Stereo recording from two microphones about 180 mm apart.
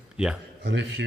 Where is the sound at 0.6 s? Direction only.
75° right (ahead or behind).